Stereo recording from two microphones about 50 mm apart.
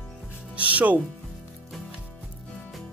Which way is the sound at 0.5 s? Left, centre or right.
Right.